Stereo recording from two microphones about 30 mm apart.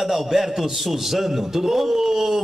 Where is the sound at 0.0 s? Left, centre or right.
Centre.